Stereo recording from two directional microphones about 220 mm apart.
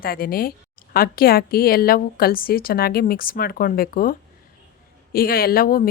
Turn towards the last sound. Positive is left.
turn(degrees=40)  # may be behind; listen again after turning